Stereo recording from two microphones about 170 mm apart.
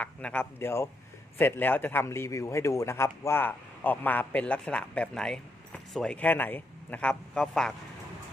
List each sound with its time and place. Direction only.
0.0 s speech: 10° left (ahead or behind)